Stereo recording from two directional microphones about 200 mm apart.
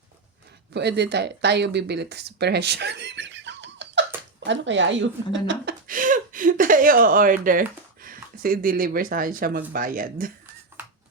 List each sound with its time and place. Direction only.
0.7 s speech: 60° right (ahead or behind)
5.9 s speech: 40° right (ahead or behind)